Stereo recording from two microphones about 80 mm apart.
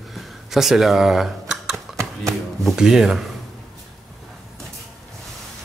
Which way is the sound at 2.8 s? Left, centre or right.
Centre.